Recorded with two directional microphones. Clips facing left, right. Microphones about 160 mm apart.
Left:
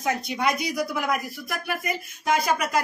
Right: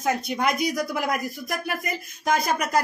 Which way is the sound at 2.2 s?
40° right (ahead or behind).